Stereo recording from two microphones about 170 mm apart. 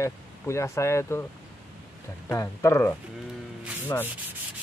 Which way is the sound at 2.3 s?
15° left (ahead or behind).